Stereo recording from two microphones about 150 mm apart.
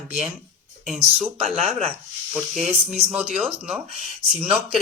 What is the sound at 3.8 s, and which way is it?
Speech, 40° right (ahead or behind).